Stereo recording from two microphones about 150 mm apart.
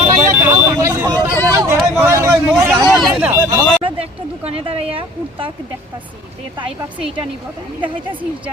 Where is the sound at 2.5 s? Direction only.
10° right (ahead or behind).